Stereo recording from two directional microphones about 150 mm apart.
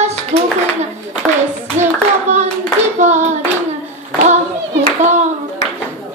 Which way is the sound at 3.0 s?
50° right (ahead or behind).